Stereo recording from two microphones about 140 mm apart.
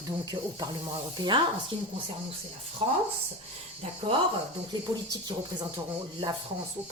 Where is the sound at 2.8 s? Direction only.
45° right (ahead or behind).